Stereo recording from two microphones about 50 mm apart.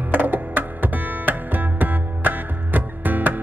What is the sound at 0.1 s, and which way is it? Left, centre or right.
Music, right.